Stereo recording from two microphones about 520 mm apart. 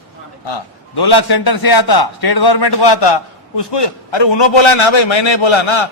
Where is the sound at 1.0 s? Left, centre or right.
Left.